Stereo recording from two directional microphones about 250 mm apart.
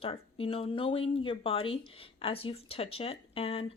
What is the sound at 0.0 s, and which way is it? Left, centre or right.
Speech, left.